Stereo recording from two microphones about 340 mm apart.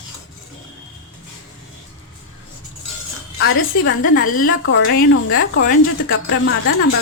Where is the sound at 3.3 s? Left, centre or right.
Left.